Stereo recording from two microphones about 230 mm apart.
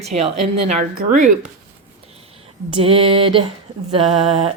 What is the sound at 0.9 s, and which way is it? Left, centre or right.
Speech, right.